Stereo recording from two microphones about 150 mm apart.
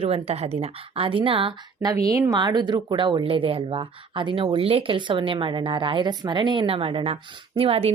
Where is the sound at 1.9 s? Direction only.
25° right (ahead or behind).